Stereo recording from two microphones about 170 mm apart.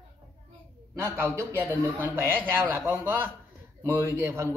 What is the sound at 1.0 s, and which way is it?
Speech, 15° right (ahead or behind).